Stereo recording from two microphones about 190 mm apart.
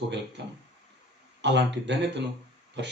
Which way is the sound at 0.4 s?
70° right (ahead or behind).